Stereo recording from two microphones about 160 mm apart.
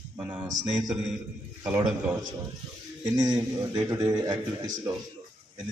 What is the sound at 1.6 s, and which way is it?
A man's voice, 15° right (ahead or behind).